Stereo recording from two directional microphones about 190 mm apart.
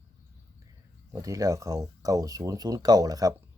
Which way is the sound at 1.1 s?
15° right (ahead or behind).